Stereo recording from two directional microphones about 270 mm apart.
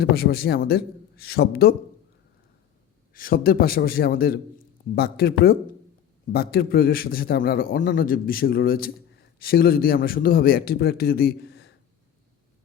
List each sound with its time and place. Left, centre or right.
0.0 s a man's voice: left
3.1 s a man's voice: left